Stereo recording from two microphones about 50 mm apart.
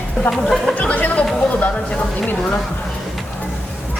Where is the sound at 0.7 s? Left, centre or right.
Left.